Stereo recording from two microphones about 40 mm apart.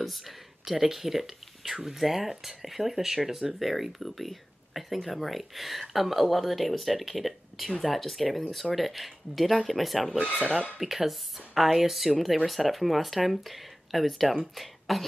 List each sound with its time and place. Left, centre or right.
0.0 s speech: centre
14.3 s speech: centre
14.6 s speech: centre